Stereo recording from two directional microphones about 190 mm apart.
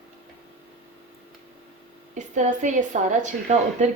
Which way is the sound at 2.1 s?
40° right (ahead or behind).